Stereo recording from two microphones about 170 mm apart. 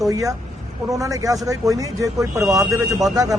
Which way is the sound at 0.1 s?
20° right (ahead or behind).